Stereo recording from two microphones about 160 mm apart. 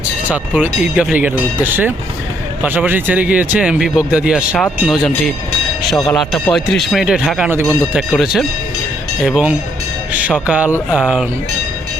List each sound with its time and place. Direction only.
0.3 s speech: 10° right (ahead or behind)